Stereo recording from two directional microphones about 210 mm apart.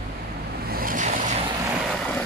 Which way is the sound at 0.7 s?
45° right (ahead or behind).